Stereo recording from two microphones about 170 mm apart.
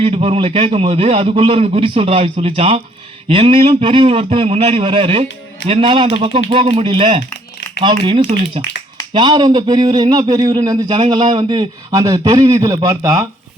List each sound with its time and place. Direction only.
0.0 s a man's voice: 35° right (ahead or behind)